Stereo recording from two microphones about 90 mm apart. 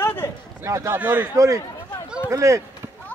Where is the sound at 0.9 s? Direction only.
20° right (ahead or behind).